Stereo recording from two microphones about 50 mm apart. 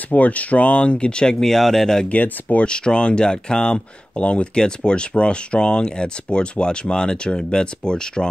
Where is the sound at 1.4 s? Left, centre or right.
Centre.